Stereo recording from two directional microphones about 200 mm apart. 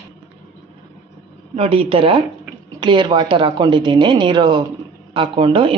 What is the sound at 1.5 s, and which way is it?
Speech, 30° right (ahead or behind).